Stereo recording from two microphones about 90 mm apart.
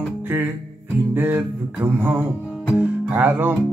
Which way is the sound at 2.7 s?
20° right (ahead or behind).